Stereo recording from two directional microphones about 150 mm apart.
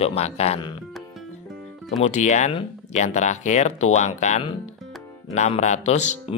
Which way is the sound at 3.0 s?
50° left (ahead or behind).